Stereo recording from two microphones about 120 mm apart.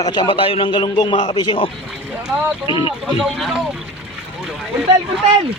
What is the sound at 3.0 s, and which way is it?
Speech, centre (ahead or behind).